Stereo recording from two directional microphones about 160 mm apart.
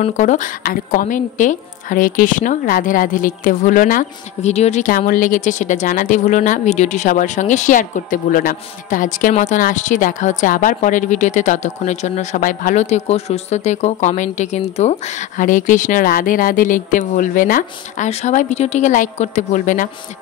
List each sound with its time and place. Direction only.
0.0 s speech: 50° left (ahead or behind)